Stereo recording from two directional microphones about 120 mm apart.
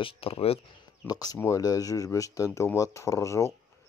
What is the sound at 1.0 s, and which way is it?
Speech, 35° left (ahead or behind).